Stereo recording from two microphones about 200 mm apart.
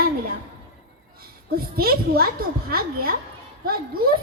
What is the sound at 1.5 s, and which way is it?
A woman's voice, 50° right (ahead or behind).